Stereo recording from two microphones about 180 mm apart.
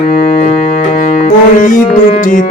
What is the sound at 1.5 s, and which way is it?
Music, 45° left (ahead or behind).